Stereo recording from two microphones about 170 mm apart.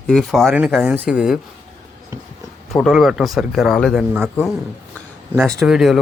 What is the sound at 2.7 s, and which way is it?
Speech, centre (ahead or behind).